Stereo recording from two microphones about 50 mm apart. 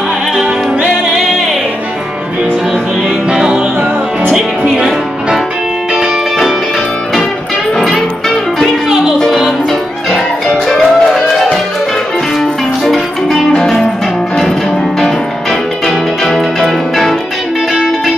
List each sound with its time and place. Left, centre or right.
3.3 s music: centre
7.7 s music: centre
8.8 s music: centre
10.7 s music: centre
12.8 s music: centre
16.3 s music: centre